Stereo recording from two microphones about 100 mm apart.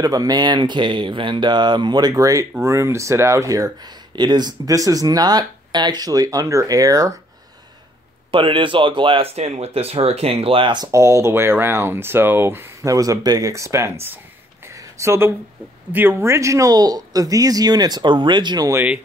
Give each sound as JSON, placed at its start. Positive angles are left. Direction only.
{"t": 0.0, "sound": "speech", "side_deg": -40}
{"t": 8.3, "sound": "speech", "side_deg": -60}
{"t": 10.9, "sound": "speech", "side_deg": -30}
{"t": 12.9, "sound": "speech", "side_deg": -35}
{"t": 14.7, "sound": "a sound", "side_deg": -30}
{"t": 15.9, "sound": "speech", "side_deg": -20}